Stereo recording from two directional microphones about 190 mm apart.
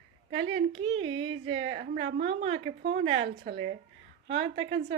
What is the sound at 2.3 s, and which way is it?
Speech, 30° right (ahead or behind).